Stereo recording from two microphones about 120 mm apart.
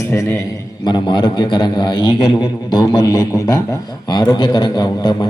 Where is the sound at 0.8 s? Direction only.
40° left (ahead or behind).